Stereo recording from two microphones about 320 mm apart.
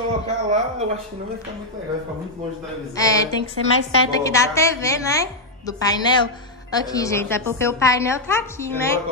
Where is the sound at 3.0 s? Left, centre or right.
Centre.